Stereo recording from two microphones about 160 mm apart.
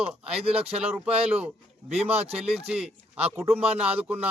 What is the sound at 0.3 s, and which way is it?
Speech, 40° right (ahead or behind).